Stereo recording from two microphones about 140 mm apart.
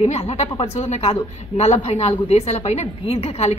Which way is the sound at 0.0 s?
50° left (ahead or behind).